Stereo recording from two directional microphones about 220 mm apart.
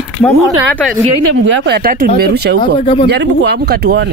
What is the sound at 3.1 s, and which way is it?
A man's voice, 50° right (ahead or behind).